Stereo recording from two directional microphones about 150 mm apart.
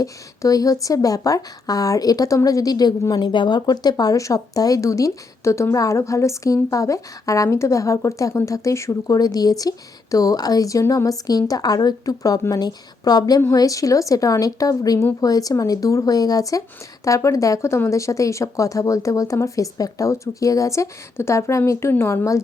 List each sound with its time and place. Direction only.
0.0 s speech: 25° left (ahead or behind)